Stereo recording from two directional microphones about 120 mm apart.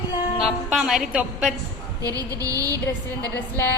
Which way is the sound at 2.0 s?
30° right (ahead or behind).